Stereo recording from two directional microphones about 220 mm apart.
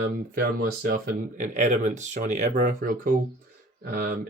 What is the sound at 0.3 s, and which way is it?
Speech, 45° right (ahead or behind).